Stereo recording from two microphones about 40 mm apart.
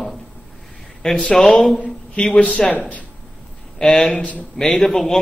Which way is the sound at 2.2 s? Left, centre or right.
Left.